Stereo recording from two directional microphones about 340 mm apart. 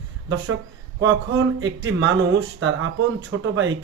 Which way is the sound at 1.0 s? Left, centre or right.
Right.